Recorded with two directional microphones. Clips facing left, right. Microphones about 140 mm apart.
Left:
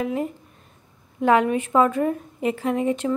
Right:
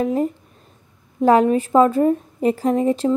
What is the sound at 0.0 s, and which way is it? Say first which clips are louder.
A woman's voice: right 5 dB; 35° right (ahead or behind).